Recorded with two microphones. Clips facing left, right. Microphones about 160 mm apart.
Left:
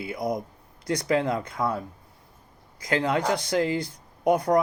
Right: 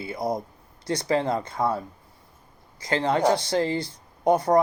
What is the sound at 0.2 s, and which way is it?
Speech, 30° right (ahead or behind).